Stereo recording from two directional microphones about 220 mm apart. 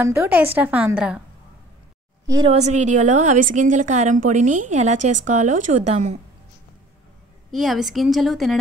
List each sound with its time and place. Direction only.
0.0 s a woman's voice: 10° right (ahead or behind)
2.2 s a woman's voice: 20° right (ahead or behind)
7.5 s a woman's voice: centre (ahead or behind)